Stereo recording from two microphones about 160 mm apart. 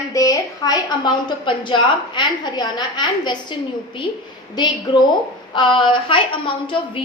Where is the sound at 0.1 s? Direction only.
20° left (ahead or behind).